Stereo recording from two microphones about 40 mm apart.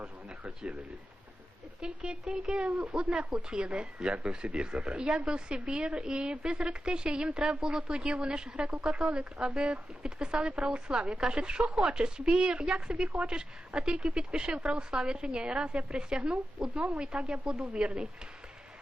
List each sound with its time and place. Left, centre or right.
0.0 s speech: right
1.8 s speech: right
17.4 s speech: right